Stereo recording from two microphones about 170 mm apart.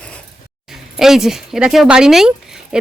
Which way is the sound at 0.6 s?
Centre (ahead or behind).